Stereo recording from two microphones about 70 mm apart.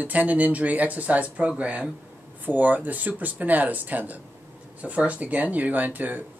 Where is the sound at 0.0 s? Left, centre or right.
Right.